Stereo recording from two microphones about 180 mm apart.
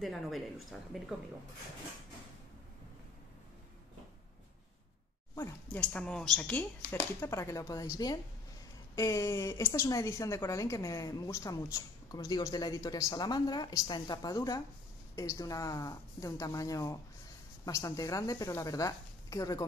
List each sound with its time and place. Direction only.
0.0 s speech: centre (ahead or behind)
5.3 s speech: 10° left (ahead or behind)